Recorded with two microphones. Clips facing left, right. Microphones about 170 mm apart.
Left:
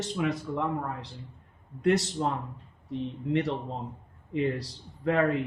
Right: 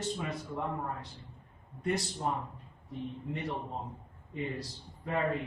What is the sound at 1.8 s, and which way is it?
A man's voice, 90° left.